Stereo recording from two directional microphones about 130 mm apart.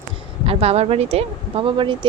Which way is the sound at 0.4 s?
50° right (ahead or behind).